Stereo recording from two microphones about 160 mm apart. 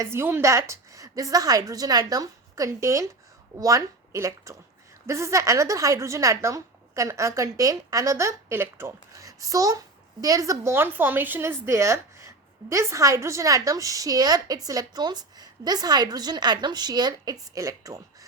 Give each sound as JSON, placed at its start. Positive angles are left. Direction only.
{"t": 0.0, "sound": "a woman's voice", "side_deg": -15}